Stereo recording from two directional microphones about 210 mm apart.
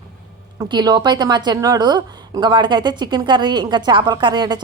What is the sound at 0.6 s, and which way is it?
Speech, 20° right (ahead or behind).